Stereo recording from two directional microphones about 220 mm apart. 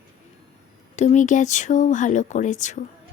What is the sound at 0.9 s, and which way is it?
Speech, 35° left (ahead or behind).